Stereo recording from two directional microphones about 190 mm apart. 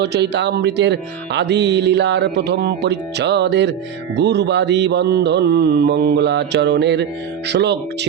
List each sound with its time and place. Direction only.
0.0 s speech: 60° right (ahead or behind)